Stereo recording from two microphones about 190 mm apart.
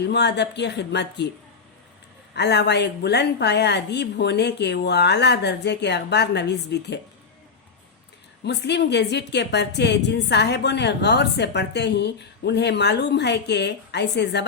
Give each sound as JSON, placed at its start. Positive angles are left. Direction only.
{"t": 0.0, "sound": "a woman's voice", "side_deg": 60}
{"t": 2.3, "sound": "a woman's voice", "side_deg": 65}
{"t": 8.4, "sound": "a woman's voice", "side_deg": 65}